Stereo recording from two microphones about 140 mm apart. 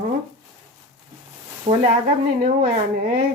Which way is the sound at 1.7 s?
65° right (ahead or behind).